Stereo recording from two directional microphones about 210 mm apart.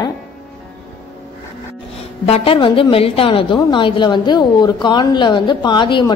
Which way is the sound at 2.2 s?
30° left (ahead or behind).